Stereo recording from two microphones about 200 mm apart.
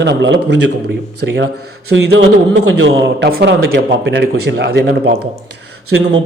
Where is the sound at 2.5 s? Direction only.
65° right (ahead or behind).